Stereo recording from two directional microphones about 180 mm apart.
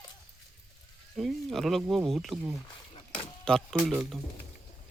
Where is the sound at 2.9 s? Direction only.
25° left (ahead or behind).